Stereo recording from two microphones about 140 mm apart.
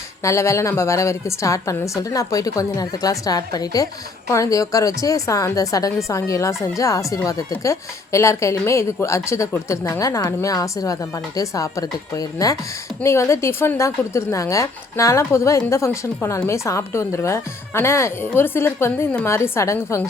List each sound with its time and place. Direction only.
0.2 s a woman's voice: 20° left (ahead or behind)